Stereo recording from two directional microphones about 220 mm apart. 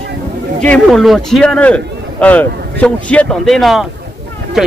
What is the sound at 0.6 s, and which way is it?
A man's voice, 5° left (ahead or behind).